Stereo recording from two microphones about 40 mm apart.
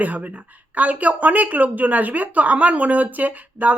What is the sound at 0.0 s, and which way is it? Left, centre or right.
Speech, right.